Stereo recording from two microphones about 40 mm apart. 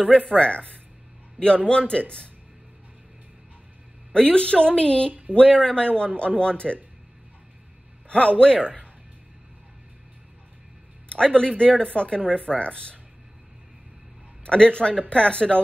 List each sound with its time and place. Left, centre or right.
0.1 s speech: left
4.1 s speech: left
8.1 s speech: left
11.1 s speech: left
14.4 s speech: left